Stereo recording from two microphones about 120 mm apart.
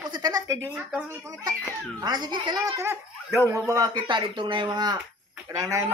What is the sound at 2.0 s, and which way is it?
A child's voice, 35° right (ahead or behind).